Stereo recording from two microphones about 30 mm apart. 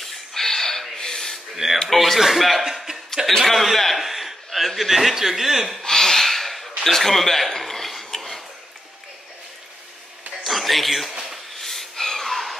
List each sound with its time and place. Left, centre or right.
0.0 s gasp: centre
1.9 s speech: centre
2.1 s speech: centre
2.6 s chuckle: centre
3.3 s chuckle: centre
4.7 s a man's voice: centre
5.9 s gasp: centre
6.8 s a sound: centre
10.4 s a sound: centre